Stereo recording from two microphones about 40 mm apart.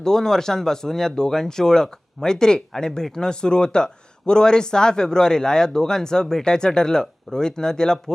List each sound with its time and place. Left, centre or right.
0.0 s speech: centre